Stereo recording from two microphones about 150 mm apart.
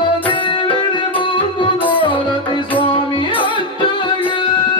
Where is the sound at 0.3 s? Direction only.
35° left (ahead or behind).